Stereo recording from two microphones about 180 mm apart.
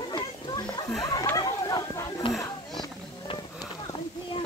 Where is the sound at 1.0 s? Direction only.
20° left (ahead or behind).